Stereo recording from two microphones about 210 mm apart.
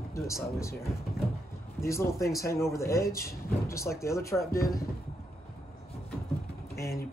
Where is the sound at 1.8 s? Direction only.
15° left (ahead or behind).